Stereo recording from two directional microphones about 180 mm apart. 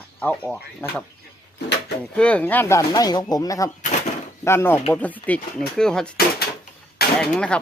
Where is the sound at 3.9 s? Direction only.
45° left (ahead or behind).